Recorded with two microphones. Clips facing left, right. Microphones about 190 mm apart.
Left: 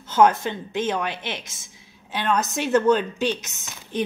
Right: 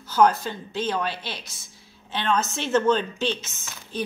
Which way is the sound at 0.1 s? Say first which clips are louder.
Left 2 dB; 20° left (ahead or behind).